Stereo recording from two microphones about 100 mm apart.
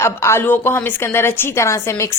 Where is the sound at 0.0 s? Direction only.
25° left (ahead or behind).